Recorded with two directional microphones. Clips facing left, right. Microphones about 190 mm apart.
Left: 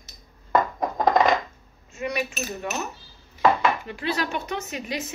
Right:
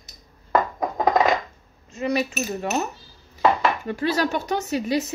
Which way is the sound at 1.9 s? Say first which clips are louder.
Right 5 dB; 35° right (ahead or behind).